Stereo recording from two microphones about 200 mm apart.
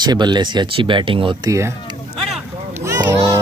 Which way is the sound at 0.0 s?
20° right (ahead or behind).